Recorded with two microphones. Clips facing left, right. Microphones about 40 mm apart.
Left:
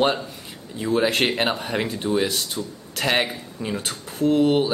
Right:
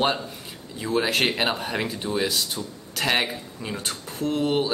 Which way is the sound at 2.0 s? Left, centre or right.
Centre.